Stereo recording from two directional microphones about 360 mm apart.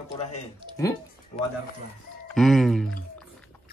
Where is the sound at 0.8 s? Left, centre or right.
Centre.